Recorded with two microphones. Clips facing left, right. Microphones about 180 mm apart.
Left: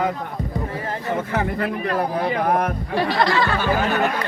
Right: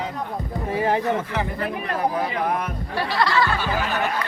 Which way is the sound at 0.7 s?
75° right (ahead or behind).